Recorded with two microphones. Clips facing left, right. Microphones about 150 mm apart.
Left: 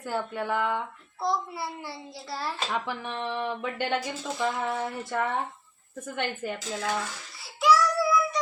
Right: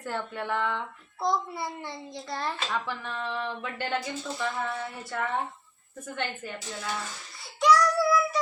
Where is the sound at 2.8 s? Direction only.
15° left (ahead or behind).